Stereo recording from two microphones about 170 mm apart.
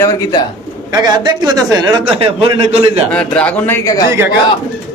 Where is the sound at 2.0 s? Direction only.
35° right (ahead or behind).